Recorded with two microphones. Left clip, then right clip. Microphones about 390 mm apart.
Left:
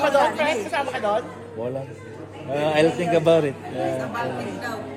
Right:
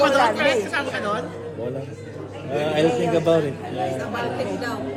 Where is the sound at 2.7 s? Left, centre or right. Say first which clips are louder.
Even; left.